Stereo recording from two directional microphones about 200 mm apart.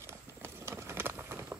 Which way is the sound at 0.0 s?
10° right (ahead or behind).